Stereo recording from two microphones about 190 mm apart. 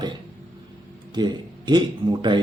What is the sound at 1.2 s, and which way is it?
Speech, 25° right (ahead or behind).